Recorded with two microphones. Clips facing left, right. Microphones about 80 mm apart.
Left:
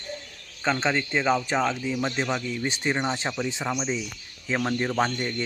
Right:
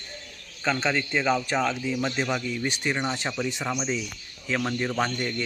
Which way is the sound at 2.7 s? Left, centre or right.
Left.